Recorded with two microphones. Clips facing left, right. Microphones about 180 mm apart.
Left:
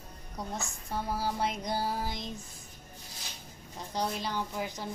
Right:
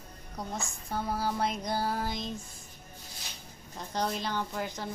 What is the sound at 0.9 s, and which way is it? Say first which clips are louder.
Speech: right 1 dB; 10° left (ahead or behind).